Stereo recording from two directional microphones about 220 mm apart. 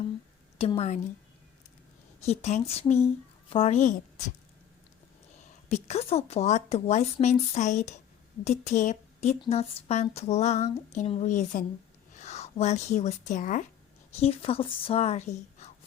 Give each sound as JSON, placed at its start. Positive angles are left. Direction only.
{"t": 0.6, "sound": "speech", "side_deg": 25}
{"t": 2.2, "sound": "speech", "side_deg": 30}
{"t": 5.6, "sound": "speech", "side_deg": 30}